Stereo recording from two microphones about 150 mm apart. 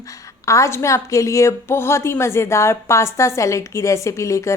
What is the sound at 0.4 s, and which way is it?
Speech, 20° left (ahead or behind).